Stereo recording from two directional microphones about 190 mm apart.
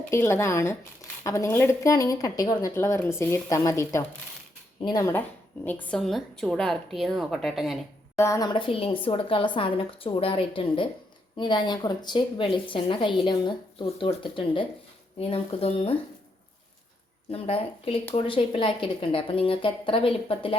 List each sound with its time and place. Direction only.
0.1 s a woman's voice: 15° left (ahead or behind)
5.6 s a woman's voice: 5° left (ahead or behind)
8.1 s a woman's voice: 15° left (ahead or behind)
17.3 s a woman's voice: 30° left (ahead or behind)